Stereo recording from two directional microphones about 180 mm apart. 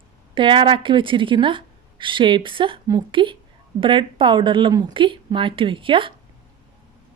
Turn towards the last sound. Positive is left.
turn(degrees=-30)  # may be behind; listen again after turning